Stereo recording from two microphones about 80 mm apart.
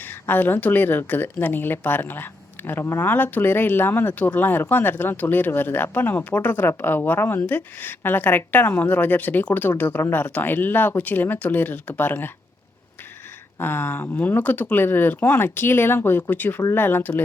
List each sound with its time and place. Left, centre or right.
0.0 s a woman's voice: left
13.6 s a woman's voice: left